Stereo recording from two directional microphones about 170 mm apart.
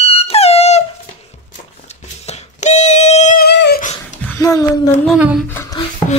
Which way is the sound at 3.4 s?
75° left (ahead or behind).